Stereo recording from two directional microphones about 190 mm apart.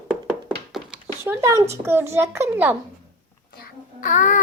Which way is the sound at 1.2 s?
15° right (ahead or behind).